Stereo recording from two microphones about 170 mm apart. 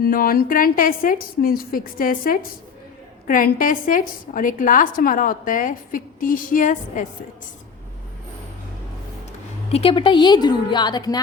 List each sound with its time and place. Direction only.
0.0 s a woman's voice: 60° left (ahead or behind)
9.6 s speech: 35° left (ahead or behind)